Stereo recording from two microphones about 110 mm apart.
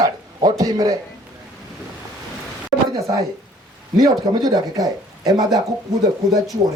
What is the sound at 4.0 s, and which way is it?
A man's voice, 35° right (ahead or behind).